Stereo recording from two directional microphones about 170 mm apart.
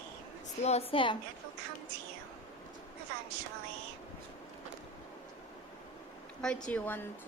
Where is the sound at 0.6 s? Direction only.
35° left (ahead or behind).